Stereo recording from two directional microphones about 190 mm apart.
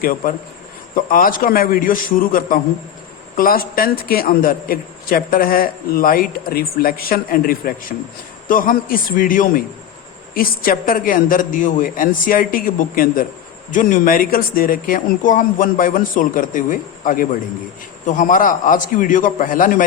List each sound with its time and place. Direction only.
0.0 s a man's voice: 45° left (ahead or behind)